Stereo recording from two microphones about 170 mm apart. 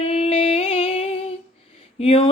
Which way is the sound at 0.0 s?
35° left (ahead or behind).